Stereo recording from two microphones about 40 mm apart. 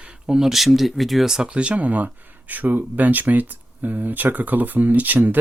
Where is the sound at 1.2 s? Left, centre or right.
Centre.